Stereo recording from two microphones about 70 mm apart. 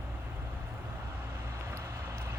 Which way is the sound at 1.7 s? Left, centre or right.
Right.